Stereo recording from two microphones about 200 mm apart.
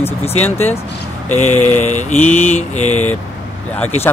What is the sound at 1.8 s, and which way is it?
Mantra, 35° left (ahead or behind).